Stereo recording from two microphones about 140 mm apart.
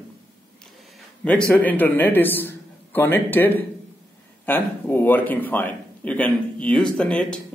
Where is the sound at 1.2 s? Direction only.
10° left (ahead or behind).